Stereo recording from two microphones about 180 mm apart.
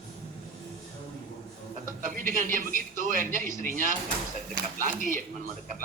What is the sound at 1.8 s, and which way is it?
Speech, 50° right (ahead or behind).